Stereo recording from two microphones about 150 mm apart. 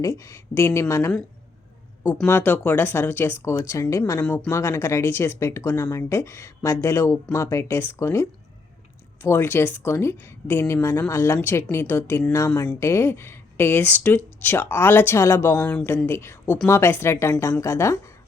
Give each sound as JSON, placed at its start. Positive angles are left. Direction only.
{"t": 0.0, "sound": "speech", "side_deg": 20}
{"t": 2.2, "sound": "speech", "side_deg": 15}
{"t": 15.5, "sound": "speech", "side_deg": 5}